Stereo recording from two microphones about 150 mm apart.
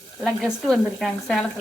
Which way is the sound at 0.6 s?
Centre (ahead or behind).